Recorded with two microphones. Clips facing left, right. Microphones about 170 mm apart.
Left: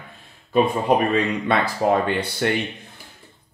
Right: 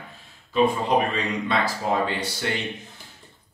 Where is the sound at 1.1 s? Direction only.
60° left (ahead or behind).